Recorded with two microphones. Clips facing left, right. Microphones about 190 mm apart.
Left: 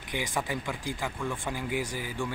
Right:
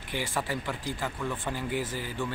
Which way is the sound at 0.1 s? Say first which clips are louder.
Even; 15° left (ahead or behind).